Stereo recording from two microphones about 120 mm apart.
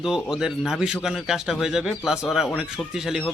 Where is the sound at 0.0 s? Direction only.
5° right (ahead or behind).